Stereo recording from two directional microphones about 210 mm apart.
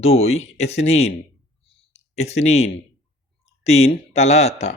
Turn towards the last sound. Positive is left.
turn(degrees=30)  # may be behind; listen again after turning